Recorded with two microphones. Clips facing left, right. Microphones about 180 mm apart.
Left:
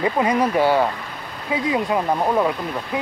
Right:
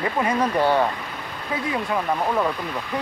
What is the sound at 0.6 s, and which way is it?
Speech, 5° left (ahead or behind).